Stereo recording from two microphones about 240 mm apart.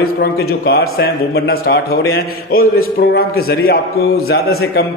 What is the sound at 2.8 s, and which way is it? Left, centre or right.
A man's voice, left.